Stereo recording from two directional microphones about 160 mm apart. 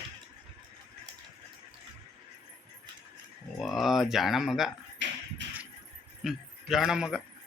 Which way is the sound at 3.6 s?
Centre (ahead or behind).